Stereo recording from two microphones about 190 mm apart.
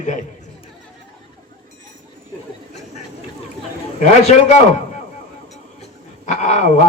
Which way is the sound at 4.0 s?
35° left (ahead or behind).